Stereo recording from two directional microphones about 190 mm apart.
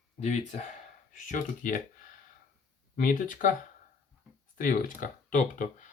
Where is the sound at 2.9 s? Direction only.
45° left (ahead or behind).